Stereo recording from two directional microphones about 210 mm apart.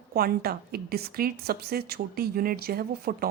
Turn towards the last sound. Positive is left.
turn(degrees=-45)  # may be behind; listen again after turning